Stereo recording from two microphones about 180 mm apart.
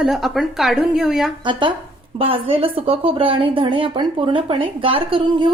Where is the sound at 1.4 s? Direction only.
25° right (ahead or behind).